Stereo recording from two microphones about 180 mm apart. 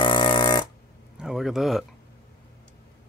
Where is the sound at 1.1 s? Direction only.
Centre (ahead or behind).